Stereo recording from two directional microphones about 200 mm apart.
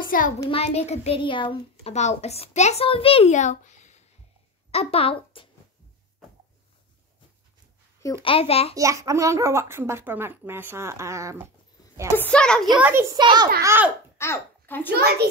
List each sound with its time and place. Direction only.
0.4 s a child's voice: 30° left (ahead or behind)
8.0 s a child's voice: 20° left (ahead or behind)
8.7 s a child's voice: 15° right (ahead or behind)
12.2 s a child's voice: 5° left (ahead or behind)
12.8 s a child's voice: 10° right (ahead or behind)
13.6 s a child's voice: 10° right (ahead or behind)
14.1 s a child's voice: 15° left (ahead or behind)